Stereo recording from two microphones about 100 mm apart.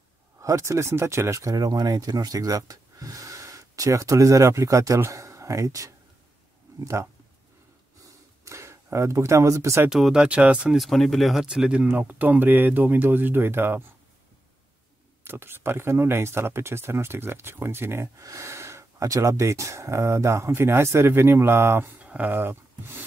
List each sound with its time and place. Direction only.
0.4 s speech: 30° right (ahead or behind)
8.5 s speech: 30° right (ahead or behind)
9.8 s speech: 5° right (ahead or behind)
10.8 s speech: centre (ahead or behind); by 13.9 s 20° right (ahead or behind)
15.2 s speech: 20° right (ahead or behind)